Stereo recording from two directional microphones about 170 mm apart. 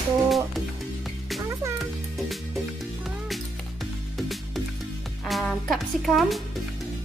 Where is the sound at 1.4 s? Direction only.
15° right (ahead or behind).